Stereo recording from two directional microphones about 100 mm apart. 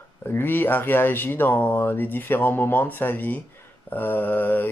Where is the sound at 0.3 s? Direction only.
20° left (ahead or behind).